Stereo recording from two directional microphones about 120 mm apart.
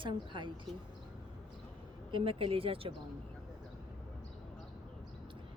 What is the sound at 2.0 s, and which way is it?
Speech, 45° right (ahead or behind).